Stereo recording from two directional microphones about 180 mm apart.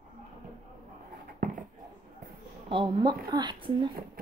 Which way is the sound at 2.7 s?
25° right (ahead or behind).